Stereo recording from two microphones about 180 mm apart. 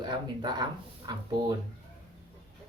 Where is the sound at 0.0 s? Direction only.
25° right (ahead or behind).